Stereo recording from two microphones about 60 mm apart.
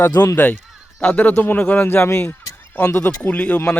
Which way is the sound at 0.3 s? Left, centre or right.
Left.